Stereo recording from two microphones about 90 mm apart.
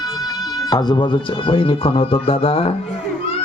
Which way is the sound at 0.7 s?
55° left (ahead or behind).